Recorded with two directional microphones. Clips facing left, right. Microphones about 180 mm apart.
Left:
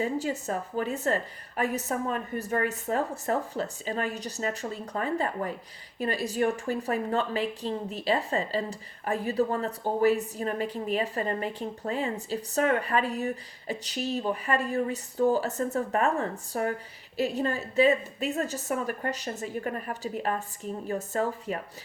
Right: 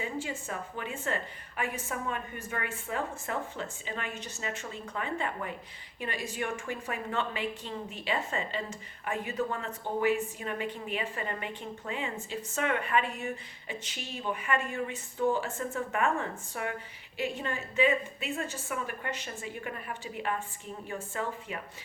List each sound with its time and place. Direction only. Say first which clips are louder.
0.0 s a woman's voice: left 7 dB; 40° left (ahead or behind)